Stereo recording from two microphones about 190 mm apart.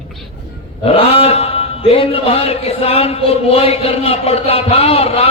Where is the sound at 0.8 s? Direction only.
30° left (ahead or behind).